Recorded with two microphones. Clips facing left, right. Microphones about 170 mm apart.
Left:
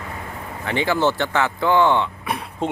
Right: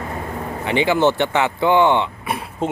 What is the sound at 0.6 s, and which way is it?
Speech, 20° right (ahead or behind).